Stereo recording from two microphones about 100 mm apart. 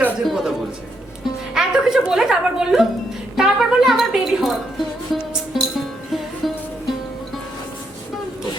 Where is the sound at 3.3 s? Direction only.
5° right (ahead or behind).